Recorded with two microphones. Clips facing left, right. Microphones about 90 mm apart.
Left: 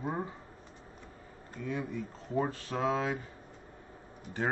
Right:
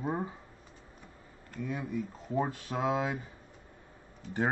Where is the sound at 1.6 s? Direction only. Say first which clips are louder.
Right 1 dB; 10° right (ahead or behind).